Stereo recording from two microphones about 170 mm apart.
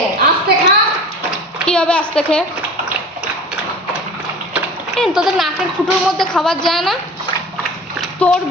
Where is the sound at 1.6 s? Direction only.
5° left (ahead or behind).